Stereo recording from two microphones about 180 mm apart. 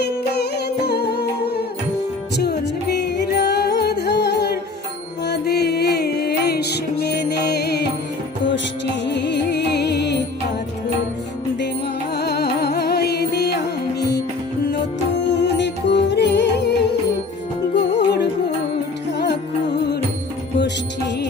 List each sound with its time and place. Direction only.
0.0 s music: 65° left (ahead or behind)
9.0 s music: 70° left (ahead or behind)
12.1 s music: 65° left (ahead or behind)
15.4 s music: 75° left (ahead or behind)
17.7 s music: 70° left (ahead or behind)